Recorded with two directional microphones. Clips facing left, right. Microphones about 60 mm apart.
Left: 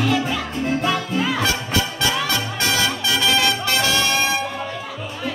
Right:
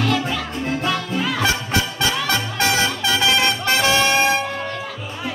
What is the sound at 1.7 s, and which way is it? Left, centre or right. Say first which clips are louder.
Music: even; right.